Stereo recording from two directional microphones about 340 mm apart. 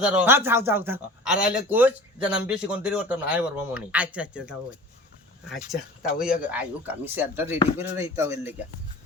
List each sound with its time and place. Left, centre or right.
0.0 s speech: centre